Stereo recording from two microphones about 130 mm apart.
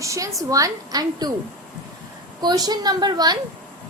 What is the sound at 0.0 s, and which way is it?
A woman's voice, 25° right (ahead or behind).